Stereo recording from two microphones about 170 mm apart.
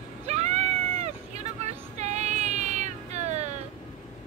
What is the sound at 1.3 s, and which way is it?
Child singing, 40° right (ahead or behind).